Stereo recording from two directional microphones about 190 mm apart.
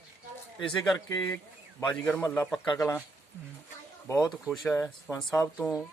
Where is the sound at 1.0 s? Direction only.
15° left (ahead or behind).